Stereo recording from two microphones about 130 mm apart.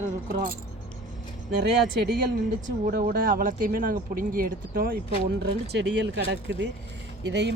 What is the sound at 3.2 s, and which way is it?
Speech, 90° right.